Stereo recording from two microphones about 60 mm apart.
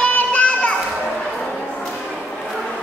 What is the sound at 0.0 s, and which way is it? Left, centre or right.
Children playing, left.